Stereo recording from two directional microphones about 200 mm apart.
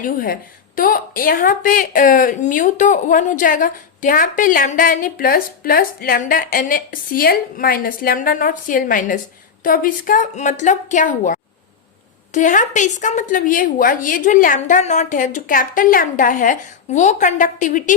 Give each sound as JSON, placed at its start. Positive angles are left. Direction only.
{"t": 0.0, "sound": "a woman's voice", "side_deg": 45}